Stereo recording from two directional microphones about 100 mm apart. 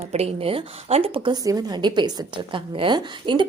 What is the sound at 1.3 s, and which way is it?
A woman's voice, 40° right (ahead or behind).